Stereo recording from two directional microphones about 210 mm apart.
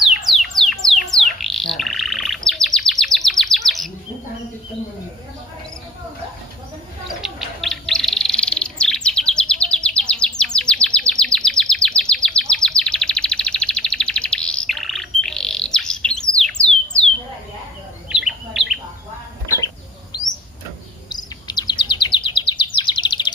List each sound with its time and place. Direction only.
0.1 s bird: centre (ahead or behind)
7.1 s bird: centre (ahead or behind)
18.1 s bird: centre (ahead or behind)
19.4 s bird flight: 15° left (ahead or behind)
21.1 s chirp: 20° left (ahead or behind)